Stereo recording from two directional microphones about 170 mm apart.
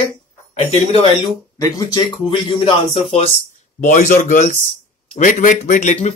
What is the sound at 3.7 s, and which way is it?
Speech, 45° left (ahead or behind).